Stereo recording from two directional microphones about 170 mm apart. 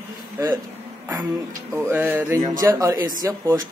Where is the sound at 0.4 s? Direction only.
15° right (ahead or behind).